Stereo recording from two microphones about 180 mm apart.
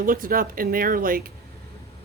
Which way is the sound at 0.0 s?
50° right (ahead or behind).